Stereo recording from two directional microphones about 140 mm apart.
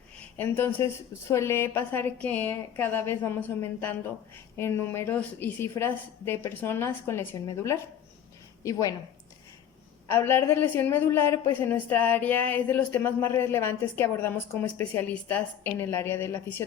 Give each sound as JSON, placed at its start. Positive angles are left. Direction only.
{"t": 0.3, "sound": "a woman's voice", "side_deg": 15}
{"t": 10.1, "sound": "speech", "side_deg": 15}